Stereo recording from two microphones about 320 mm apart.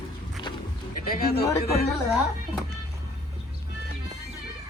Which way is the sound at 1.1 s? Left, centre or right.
Left.